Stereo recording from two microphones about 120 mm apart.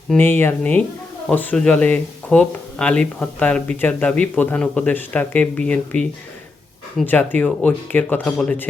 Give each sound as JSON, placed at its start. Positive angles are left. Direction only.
{"t": 0.2, "sound": "speech", "side_deg": 15}